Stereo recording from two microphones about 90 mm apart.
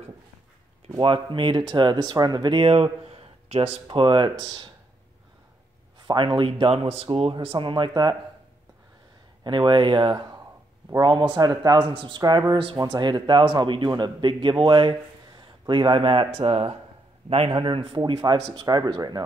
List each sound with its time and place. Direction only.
0.9 s a man's voice: 70° right (ahead or behind); by 2.6 s 55° right (ahead or behind)
2.6 s speech: 90° right; by 4.6 s 70° right (ahead or behind)
6.0 s speech: 65° right (ahead or behind)
9.4 s a man's voice: 60° right (ahead or behind)
11.9 s speech: 65° right (ahead or behind)
12.2 s speech: 50° right (ahead or behind)
12.9 s a man's voice: 60° right (ahead or behind); by 16.7 s 85° right
17.5 s a man's voice: 60° right (ahead or behind)